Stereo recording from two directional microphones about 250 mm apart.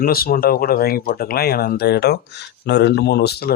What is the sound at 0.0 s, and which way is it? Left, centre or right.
Speech, left.